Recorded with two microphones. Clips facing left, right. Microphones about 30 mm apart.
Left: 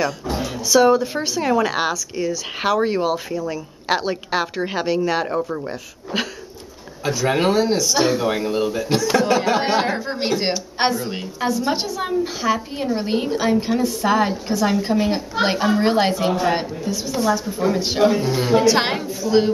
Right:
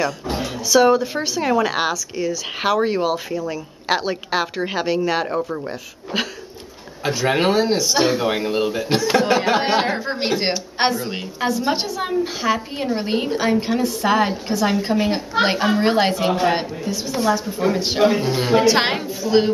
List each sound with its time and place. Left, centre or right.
0.7 s speech: centre